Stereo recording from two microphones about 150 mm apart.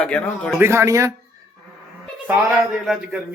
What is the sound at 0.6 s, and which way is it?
Speech, 15° right (ahead or behind).